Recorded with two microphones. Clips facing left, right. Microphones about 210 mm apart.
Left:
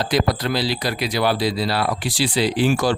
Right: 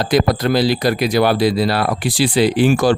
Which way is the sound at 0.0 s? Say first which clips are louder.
Right 5 dB; 50° right (ahead or behind).